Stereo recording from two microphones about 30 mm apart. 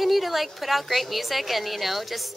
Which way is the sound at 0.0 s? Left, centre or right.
Centre.